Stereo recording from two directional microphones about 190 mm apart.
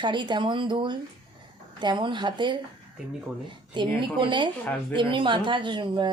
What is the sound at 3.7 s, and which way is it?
Speech, 25° right (ahead or behind).